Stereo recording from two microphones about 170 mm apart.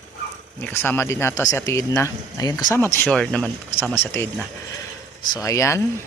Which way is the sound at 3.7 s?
15° left (ahead or behind).